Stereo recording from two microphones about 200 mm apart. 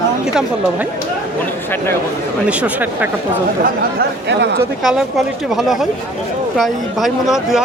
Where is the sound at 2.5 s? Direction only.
5° right (ahead or behind).